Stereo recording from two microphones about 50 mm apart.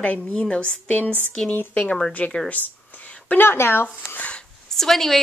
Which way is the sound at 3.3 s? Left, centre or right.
Left.